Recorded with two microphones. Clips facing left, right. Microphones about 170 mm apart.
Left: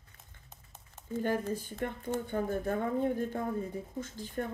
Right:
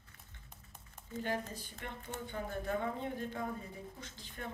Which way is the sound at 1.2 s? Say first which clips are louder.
Left 7 dB; 45° left (ahead or behind).